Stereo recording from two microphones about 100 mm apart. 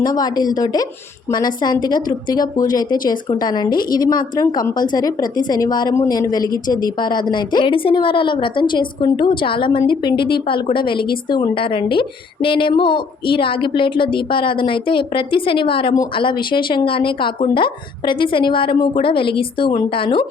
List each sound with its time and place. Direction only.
0.0 s a woman's voice: 40° left (ahead or behind); by 19.7 s 60° left (ahead or behind)